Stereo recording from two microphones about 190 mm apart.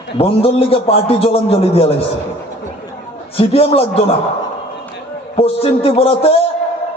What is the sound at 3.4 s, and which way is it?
Speech, 30° left (ahead or behind).